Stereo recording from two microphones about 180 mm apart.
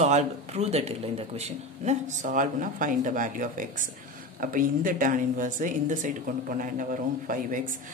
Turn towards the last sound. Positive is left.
turn(degrees=-50)  # may be behind; listen again after turning